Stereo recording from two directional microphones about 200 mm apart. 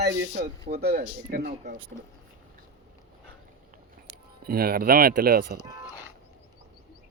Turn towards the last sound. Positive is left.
turn(degrees=-50)  # may be behind; listen again after turning